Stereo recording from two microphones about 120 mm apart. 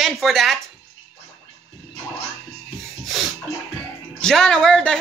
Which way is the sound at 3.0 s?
Centre (ahead or behind).